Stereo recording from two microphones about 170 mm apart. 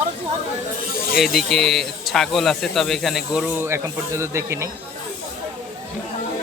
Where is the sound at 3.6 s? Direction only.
15° right (ahead or behind).